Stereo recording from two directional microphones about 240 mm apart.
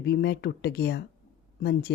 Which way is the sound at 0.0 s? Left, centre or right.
Left.